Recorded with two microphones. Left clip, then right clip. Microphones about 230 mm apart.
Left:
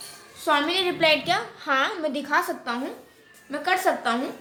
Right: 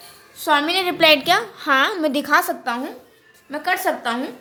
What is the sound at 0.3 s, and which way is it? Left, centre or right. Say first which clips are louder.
A woman's voice: right 4 dB; right.